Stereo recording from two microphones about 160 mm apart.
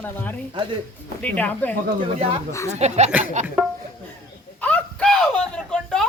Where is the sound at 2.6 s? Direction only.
45° right (ahead or behind).